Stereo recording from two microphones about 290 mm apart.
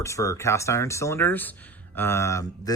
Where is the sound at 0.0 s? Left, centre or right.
Centre.